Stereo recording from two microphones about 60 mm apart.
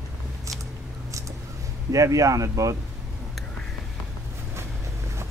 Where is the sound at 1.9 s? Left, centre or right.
Right.